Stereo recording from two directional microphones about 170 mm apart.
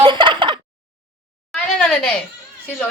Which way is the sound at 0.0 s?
30° right (ahead or behind).